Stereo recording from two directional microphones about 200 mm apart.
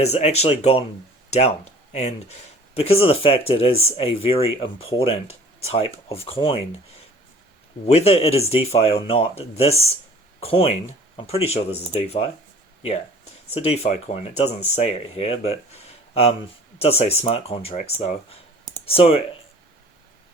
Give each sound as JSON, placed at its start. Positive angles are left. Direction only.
{"t": 0.0, "sound": "speech", "side_deg": 30}
{"t": 2.7, "sound": "speech", "side_deg": 30}
{"t": 7.9, "sound": "speech", "side_deg": 30}
{"t": 13.5, "sound": "speech", "side_deg": 30}